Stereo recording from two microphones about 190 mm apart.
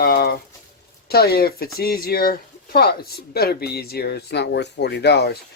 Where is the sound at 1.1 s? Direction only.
55° left (ahead or behind).